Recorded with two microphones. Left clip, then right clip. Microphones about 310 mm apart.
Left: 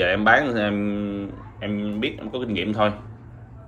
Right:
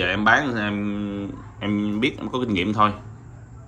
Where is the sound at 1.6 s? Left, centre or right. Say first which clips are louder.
Right 3 dB; centre.